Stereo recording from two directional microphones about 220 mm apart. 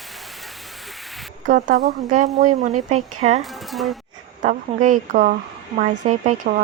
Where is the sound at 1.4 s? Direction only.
35° right (ahead or behind).